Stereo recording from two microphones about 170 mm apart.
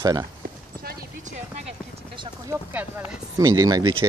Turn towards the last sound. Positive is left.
turn(degrees=-25)  # may be behind; listen again after turning